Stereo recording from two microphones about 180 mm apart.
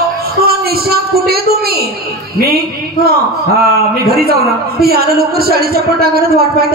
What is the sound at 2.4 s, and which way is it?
A man's voice, 60° right (ahead or behind).